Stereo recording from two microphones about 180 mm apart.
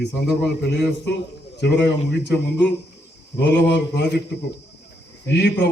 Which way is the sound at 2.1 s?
70° left (ahead or behind).